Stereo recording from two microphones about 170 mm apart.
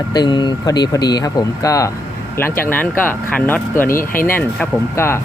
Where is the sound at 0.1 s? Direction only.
25° left (ahead or behind).